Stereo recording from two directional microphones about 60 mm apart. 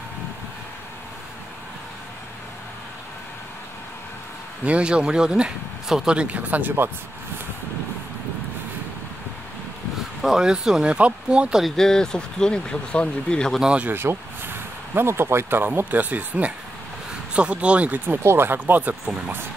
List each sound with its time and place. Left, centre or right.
4.6 s speech: centre
6.1 s speech: right
10.2 s speech: centre
11.6 s speech: centre
13.6 s speech: centre
13.8 s speech: right
18.2 s speech: right
18.8 s speech: right